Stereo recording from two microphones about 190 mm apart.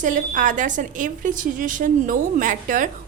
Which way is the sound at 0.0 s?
40° right (ahead or behind).